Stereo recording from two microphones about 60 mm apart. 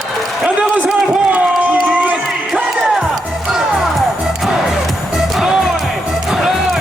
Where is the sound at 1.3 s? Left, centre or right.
Right.